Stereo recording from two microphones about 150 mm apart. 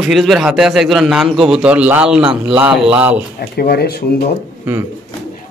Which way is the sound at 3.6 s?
90° left.